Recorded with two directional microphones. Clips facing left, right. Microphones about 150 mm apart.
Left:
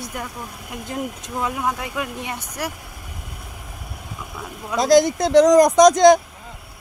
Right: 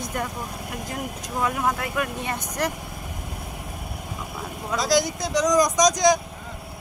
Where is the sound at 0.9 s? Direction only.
25° left (ahead or behind); by 2.7 s 10° left (ahead or behind).